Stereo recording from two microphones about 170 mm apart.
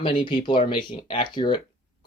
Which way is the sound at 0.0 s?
30° left (ahead or behind).